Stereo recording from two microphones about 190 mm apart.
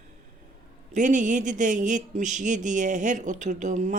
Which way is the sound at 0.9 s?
40° right (ahead or behind).